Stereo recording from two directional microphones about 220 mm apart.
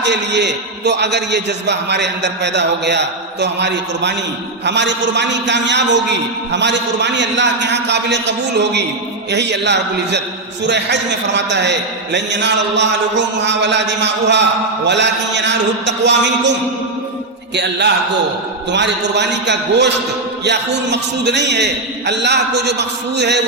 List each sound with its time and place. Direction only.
0.0 s a man's voice: 50° right (ahead or behind)
17.5 s a man's voice: 50° right (ahead or behind)